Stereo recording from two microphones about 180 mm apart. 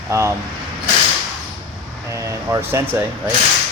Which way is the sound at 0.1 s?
15° right (ahead or behind).